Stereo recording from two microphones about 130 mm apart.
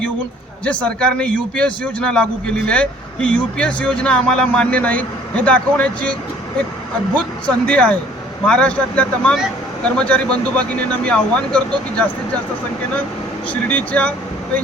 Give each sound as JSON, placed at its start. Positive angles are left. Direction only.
{"t": 0.6, "sound": "speech", "side_deg": 10}
{"t": 13.5, "sound": "speech", "side_deg": 10}